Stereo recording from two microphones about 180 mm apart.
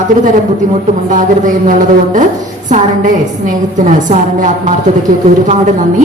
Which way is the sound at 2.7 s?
45° right (ahead or behind).